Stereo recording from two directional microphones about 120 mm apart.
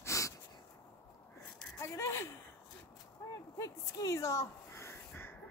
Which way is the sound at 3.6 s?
25° left (ahead or behind).